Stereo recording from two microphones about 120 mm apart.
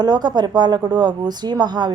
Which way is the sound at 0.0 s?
35° right (ahead or behind).